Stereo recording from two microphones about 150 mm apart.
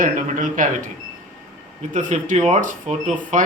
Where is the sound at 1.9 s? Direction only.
55° right (ahead or behind).